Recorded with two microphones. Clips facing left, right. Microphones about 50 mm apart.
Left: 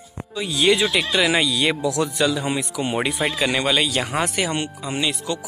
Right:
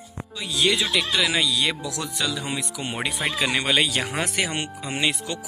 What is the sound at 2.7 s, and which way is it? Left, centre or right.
Speech, centre.